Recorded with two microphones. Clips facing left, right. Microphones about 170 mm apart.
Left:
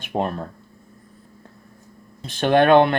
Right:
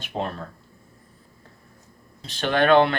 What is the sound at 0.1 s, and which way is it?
Speech, 50° left (ahead or behind).